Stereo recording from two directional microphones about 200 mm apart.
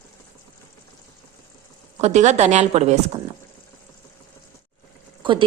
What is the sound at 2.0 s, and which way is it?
A woman's voice, 35° right (ahead or behind).